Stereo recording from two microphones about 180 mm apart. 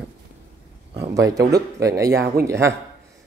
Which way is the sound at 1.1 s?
20° right (ahead or behind).